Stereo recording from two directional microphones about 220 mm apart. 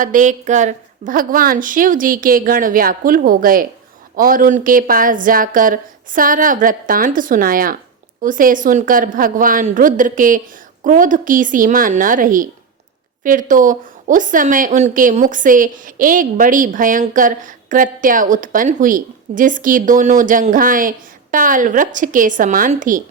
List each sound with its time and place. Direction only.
0.0 s a woman's voice: 35° right (ahead or behind)